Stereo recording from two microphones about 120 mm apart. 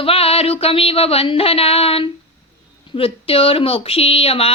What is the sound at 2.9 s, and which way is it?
A woman's voice, 50° left (ahead or behind).